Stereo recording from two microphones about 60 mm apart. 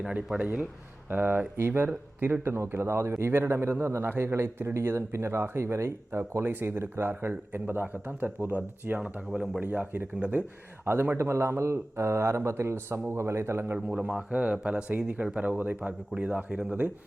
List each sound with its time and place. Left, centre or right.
0.3 s speech: right
1.1 s speech: right
9.0 s speech: centre
9.6 s speech: right
10.2 s speech: right
10.9 s speech: right
11.2 s speech: right
13.7 s speech: centre